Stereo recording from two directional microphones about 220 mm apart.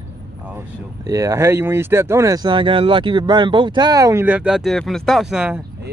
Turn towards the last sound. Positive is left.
turn(degrees=-5)  # may be behind; listen again after turning